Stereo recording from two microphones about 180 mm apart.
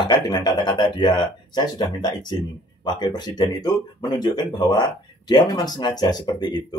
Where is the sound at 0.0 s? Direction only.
25° left (ahead or behind).